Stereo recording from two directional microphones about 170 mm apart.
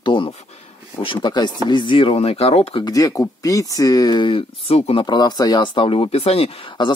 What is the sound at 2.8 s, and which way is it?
Speech, 20° left (ahead or behind).